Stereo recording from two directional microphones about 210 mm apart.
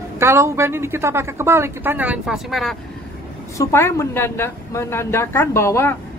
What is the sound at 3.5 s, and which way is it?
A woman's voice, 15° left (ahead or behind).